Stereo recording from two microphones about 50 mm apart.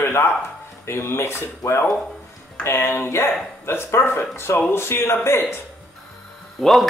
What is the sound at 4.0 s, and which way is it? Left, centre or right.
Speech, left.